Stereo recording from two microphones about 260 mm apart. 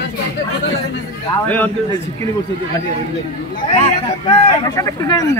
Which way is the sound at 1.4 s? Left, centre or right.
Centre.